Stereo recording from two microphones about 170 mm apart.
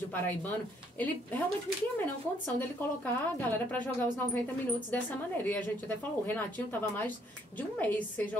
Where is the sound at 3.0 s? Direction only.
10° left (ahead or behind).